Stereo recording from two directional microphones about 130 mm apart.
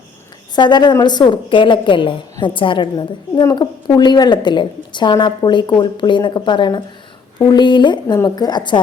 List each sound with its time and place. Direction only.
0.5 s a woman's voice: 35° left (ahead or behind)
8.0 s a woman's voice: 25° left (ahead or behind)